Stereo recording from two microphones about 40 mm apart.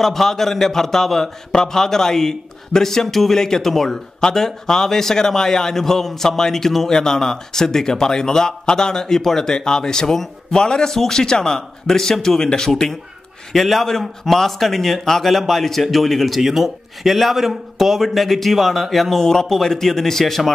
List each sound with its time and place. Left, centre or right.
0.0 s a man's voice: centre